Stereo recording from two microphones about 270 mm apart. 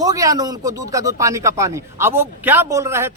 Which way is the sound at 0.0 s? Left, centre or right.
Centre.